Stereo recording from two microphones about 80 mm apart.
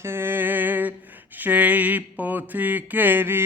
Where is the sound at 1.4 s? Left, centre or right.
Centre.